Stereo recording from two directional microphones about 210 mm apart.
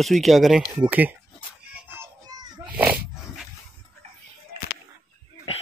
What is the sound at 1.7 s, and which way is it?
Child singing, 10° right (ahead or behind).